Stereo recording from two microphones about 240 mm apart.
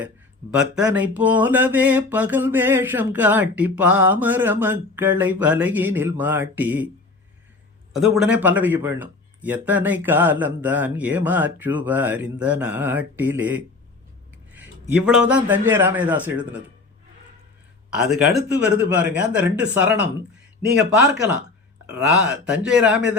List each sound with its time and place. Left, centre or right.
0.5 s speech: centre
8.0 s a man's voice: centre
17.9 s speech: centre
18.3 s speech: right
18.9 s speech: centre